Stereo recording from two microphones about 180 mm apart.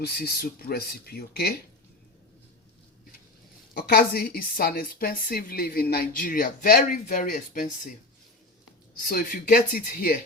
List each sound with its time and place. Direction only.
0.0 s a woman's voice: 60° left (ahead or behind)
3.8 s a woman's voice: 55° left (ahead or behind)
9.0 s speech: 50° left (ahead or behind)